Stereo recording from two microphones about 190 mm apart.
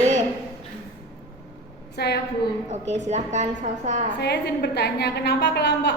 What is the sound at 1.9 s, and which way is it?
Speech, 60° left (ahead or behind).